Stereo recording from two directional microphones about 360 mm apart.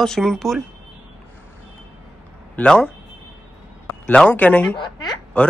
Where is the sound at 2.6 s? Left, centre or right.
Centre.